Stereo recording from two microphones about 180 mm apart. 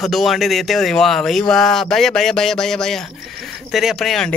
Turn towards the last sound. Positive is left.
turn(degrees=0)  # may be behind; listen again after turning